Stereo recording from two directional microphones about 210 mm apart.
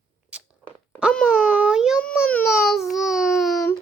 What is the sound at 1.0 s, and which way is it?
Wail, 5° left (ahead or behind).